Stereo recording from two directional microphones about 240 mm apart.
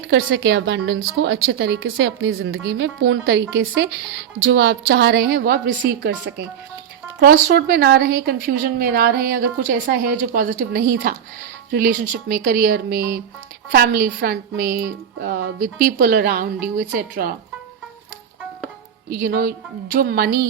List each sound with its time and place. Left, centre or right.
0.1 s a woman's voice: right
7.2 s a woman's voice: right
19.1 s a woman's voice: right